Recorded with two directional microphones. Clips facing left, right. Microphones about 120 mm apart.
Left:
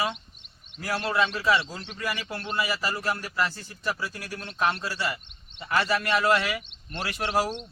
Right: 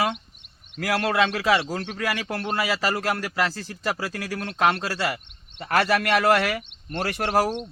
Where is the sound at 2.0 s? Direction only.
75° right (ahead or behind).